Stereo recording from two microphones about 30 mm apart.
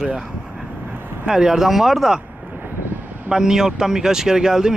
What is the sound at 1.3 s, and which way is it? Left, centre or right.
Speech, centre.